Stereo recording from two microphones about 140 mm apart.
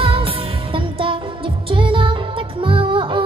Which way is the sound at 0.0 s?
40° right (ahead or behind).